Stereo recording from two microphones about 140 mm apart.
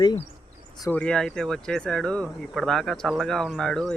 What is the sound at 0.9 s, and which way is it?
Speech, 10° left (ahead or behind).